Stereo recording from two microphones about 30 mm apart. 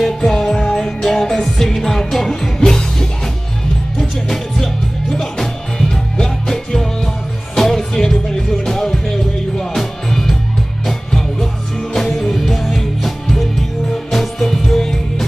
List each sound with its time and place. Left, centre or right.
0.2 s music: centre
4.0 s music: centre
5.9 s music: left; by 15.2 s centre